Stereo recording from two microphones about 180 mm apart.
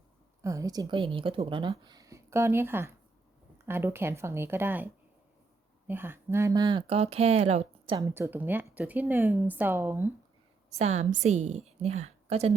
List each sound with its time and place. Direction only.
0.4 s speech: 20° right (ahead or behind)
5.9 s speech: 10° right (ahead or behind); by 7.9 s 35° right (ahead or behind)
7.9 s speech: 15° right (ahead or behind)
10.7 s speech: 35° right (ahead or behind)